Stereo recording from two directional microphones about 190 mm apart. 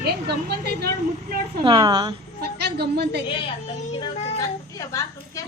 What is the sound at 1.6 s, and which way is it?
Speech, 25° right (ahead or behind).